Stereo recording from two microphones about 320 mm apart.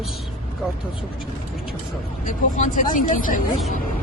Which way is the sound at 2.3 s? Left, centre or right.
Left.